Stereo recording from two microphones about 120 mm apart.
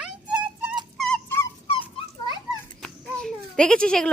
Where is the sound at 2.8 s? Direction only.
5° left (ahead or behind).